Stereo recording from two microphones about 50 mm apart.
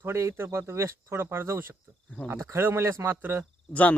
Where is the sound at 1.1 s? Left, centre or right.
Right.